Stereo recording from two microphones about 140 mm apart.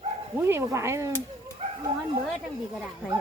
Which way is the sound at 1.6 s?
55° right (ahead or behind).